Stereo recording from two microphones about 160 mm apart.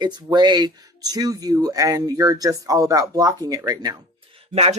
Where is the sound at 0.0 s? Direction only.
25° right (ahead or behind).